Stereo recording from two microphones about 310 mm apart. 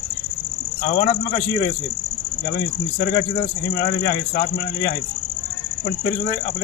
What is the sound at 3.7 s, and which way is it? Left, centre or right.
Speech, centre.